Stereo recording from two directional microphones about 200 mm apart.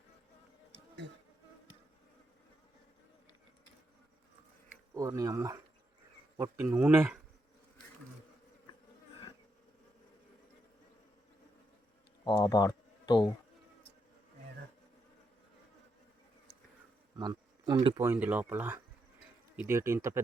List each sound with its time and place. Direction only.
1.0 s insect: 65° right (ahead or behind)
4.9 s speech: 15° right (ahead or behind)
12.2 s a sound: 15° left (ahead or behind)
17.2 s insect: 20° right (ahead or behind)
17.7 s speech: 25° right (ahead or behind)
18.0 s speech: 10° right (ahead or behind)